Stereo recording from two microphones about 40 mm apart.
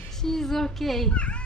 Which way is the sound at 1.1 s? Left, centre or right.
Left.